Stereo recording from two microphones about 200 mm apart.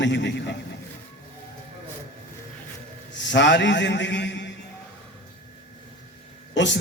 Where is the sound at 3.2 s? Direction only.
60° left (ahead or behind).